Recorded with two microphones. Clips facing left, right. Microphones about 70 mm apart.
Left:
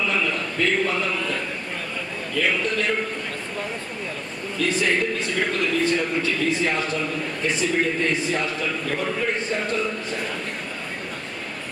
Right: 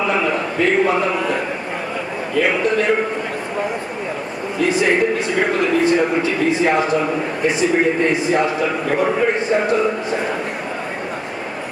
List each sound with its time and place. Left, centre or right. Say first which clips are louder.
0.0 s a sound: right 6 dB; right
2.3 s a man's voice: right 6 dB; right
4.7 s a man's voice: right 7 dB; centre
9.3 s a man's voice: right 8 dB; centre